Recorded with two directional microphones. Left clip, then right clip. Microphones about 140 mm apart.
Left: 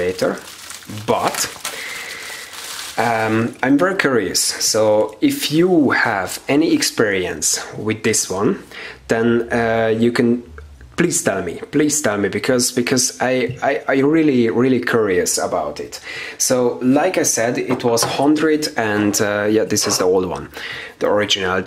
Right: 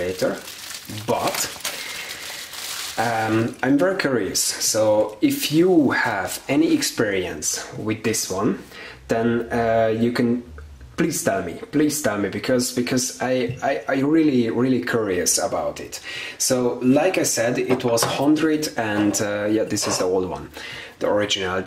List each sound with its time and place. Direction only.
0.2 s speech: 30° left (ahead or behind)
3.0 s speech: 35° left (ahead or behind)